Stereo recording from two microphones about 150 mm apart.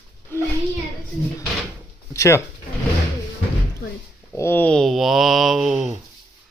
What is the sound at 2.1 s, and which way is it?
Speech, 20° left (ahead or behind).